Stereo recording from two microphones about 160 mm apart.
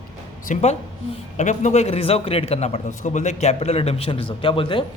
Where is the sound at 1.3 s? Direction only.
50° left (ahead or behind); by 4.8 s 30° left (ahead or behind).